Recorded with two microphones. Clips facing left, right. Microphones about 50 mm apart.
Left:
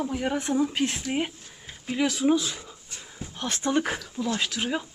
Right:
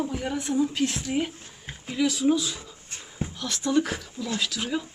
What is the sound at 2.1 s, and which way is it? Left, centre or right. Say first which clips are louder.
Speech: right 1 dB; centre.